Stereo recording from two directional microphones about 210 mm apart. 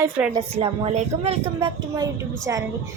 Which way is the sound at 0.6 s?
30° right (ahead or behind).